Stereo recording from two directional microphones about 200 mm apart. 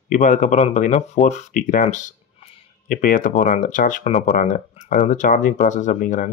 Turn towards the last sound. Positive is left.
turn(degrees=40)  # may be behind; listen again after turning